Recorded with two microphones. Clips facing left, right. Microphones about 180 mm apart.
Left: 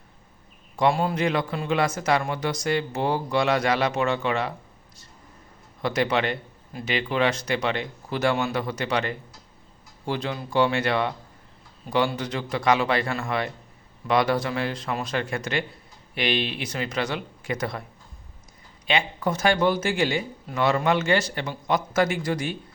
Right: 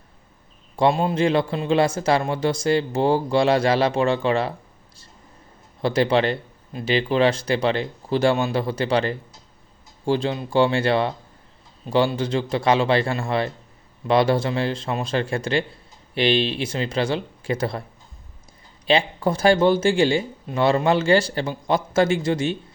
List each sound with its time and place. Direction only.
0.8 s a man's voice: 25° right (ahead or behind)
5.8 s a man's voice: 30° right (ahead or behind)
18.9 s a man's voice: 30° right (ahead or behind)